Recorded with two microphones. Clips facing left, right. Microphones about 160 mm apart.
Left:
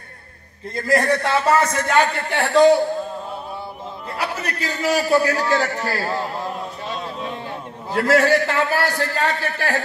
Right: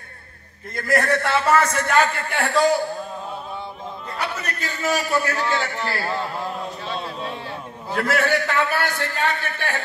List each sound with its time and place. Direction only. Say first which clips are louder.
0.8 s a man's voice: left 2 dB; 20° left (ahead or behind)
1.4 s a man's voice: left 1 dB; 30° left (ahead or behind)
1.8 s a man's voice: left 1 dB; 10° left (ahead or behind)
2.3 s a man's voice: left 6 dB; 30° left (ahead or behind)
4.2 s a man's voice: left 3 dB; 35° left (ahead or behind)
6.0 s a man's voice: left 2 dB; 15° left (ahead or behind)
7.9 s a man's voice: left 5 dB; 35° left (ahead or behind)